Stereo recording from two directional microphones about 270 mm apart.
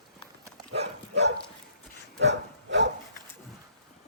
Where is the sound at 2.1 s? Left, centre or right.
Right.